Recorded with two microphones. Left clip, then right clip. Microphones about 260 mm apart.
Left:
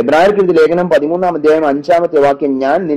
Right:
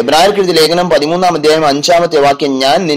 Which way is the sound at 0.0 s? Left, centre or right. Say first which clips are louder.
Right 1 dB; right.